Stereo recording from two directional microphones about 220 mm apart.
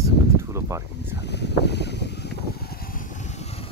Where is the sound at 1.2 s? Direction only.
50° left (ahead or behind).